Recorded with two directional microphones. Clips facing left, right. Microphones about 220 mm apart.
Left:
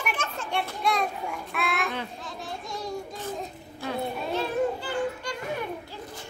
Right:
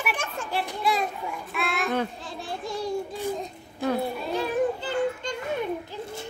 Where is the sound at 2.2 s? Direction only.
30° right (ahead or behind).